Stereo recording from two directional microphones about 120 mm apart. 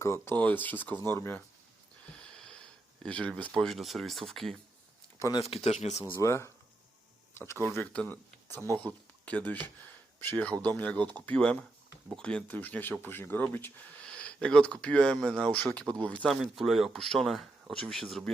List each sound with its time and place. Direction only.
0.0 s speech: 20° left (ahead or behind)
2.2 s wheeze: 5° left (ahead or behind)
3.0 s speech: 10° left (ahead or behind)
5.4 s speech: 60° left (ahead or behind)
6.1 s speech: 20° left (ahead or behind)
16.3 s speech: centre (ahead or behind)